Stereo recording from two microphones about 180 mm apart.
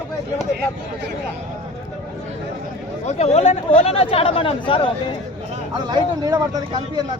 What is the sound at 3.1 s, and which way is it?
Speech, 40° left (ahead or behind).